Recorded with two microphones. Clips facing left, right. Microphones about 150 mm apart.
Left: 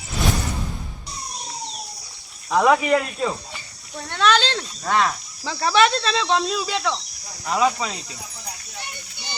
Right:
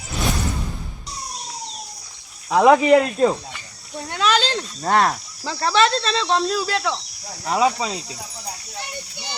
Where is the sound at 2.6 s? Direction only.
25° right (ahead or behind).